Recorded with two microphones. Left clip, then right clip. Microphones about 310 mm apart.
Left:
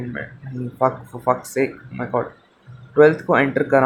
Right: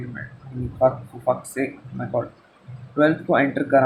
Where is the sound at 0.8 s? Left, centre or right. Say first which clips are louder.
Right 1 dB; centre.